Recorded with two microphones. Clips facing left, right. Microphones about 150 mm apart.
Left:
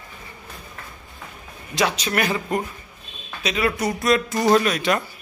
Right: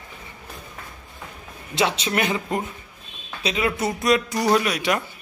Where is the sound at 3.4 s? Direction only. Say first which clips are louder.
Left 1 dB; 20° right (ahead or behind).